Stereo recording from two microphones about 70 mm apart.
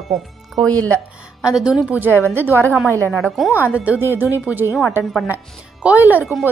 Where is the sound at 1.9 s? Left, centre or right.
Right.